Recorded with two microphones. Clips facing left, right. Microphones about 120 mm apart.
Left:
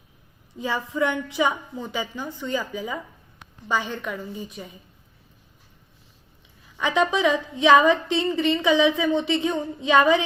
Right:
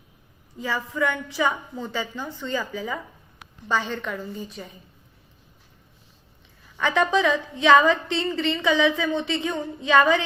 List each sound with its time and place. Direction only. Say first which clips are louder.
0.5 s a woman's voice: left 1 dB; 20° left (ahead or behind)
6.7 s a woman's voice: right 1 dB; 15° left (ahead or behind)